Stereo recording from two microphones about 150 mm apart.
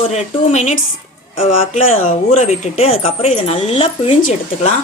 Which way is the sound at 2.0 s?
55° left (ahead or behind).